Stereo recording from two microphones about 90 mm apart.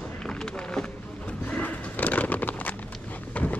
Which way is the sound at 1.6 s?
20° left (ahead or behind).